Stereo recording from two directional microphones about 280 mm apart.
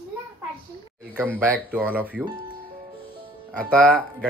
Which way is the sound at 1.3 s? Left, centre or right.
Centre.